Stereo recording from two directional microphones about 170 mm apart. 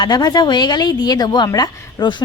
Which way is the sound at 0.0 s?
25° left (ahead or behind).